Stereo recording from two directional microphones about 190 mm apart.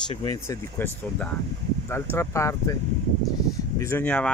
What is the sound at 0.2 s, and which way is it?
Speech, 20° left (ahead or behind).